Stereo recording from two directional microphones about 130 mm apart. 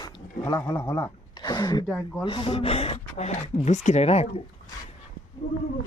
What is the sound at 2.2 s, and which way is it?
Speech, 40° left (ahead or behind).